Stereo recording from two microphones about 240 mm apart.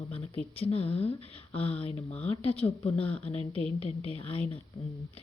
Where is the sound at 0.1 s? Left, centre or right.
Left.